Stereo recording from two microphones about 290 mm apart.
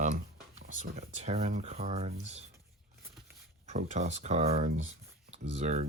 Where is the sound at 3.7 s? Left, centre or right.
Right.